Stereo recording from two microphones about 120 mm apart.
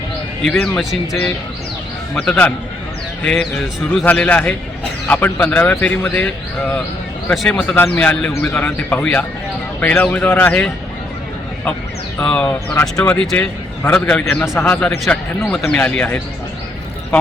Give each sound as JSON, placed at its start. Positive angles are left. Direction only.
{"t": 0.4, "sound": "a man's voice", "side_deg": 0}
{"t": 2.1, "sound": "a man's voice", "side_deg": 10}
{"t": 12.2, "sound": "a man's voice", "side_deg": 5}